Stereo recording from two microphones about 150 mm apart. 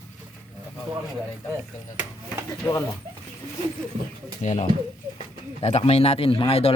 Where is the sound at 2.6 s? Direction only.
15° left (ahead or behind).